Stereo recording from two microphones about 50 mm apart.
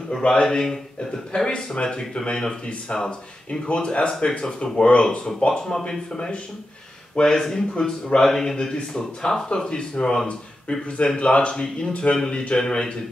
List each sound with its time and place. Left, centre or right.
0.3 s a man's voice: centre